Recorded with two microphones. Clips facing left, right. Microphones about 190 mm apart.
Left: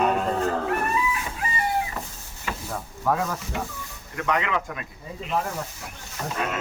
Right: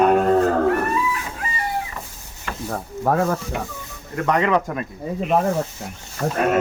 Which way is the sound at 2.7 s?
50° right (ahead or behind).